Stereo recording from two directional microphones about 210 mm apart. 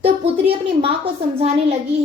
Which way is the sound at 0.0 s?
25° right (ahead or behind).